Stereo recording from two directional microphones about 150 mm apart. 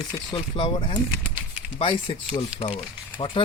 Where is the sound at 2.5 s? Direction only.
40° left (ahead or behind).